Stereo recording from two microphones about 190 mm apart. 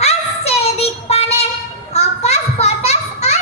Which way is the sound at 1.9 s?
35° left (ahead or behind).